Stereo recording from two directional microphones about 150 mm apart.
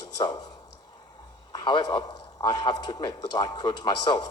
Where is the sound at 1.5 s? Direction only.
30° left (ahead or behind).